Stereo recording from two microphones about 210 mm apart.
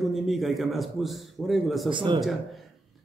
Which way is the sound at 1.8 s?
25° right (ahead or behind).